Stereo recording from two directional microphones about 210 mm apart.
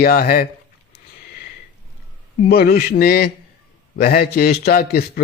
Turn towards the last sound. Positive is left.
turn(degrees=45)  # may be behind; listen again after turning